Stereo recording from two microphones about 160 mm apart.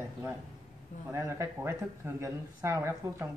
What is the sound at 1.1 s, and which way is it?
Speech, 20° right (ahead or behind).